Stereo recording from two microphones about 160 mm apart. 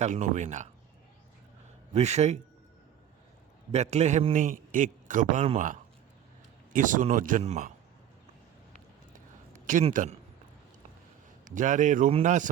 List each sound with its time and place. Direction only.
0.0 s a man's voice: 50° right (ahead or behind)
1.9 s a man's voice: 45° right (ahead or behind)
3.7 s a man's voice: 45° right (ahead or behind)
9.5 s a sound: 55° right (ahead or behind)
9.9 s speech: 55° right (ahead or behind)
11.4 s a man's voice: 50° right (ahead or behind)